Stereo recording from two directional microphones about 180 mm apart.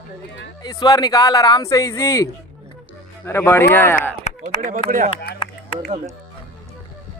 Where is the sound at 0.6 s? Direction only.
20° left (ahead or behind).